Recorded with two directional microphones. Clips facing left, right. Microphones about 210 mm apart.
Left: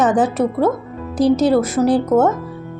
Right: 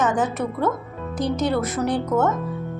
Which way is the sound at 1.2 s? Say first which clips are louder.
Left 9 dB; 85° left.